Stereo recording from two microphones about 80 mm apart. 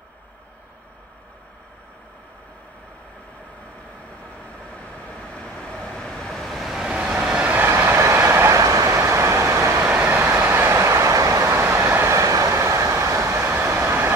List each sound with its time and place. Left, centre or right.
4.7 s vehicle: centre
7.5 s vehicle: right
9.8 s train: centre
10.3 s train: right